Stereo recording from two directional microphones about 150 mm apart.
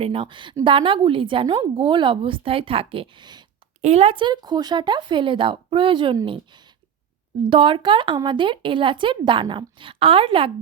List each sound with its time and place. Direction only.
0.0 s a woman's voice: 35° right (ahead or behind)
3.8 s a woman's voice: 45° right (ahead or behind)
7.5 s a woman's voice: 35° right (ahead or behind)